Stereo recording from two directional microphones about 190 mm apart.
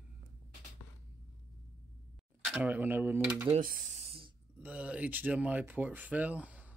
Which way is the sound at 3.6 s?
45° right (ahead or behind).